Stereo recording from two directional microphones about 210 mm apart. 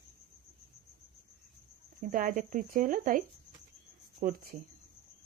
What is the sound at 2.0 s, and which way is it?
Speech, 40° right (ahead or behind).